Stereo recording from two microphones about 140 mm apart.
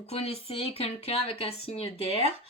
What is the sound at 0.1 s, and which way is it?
Speech, 45° left (ahead or behind).